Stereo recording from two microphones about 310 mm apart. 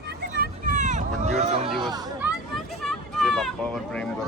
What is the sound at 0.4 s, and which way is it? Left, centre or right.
Hubbub, right.